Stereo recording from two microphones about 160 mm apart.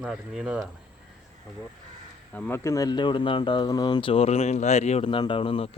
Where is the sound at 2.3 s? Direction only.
15° left (ahead or behind).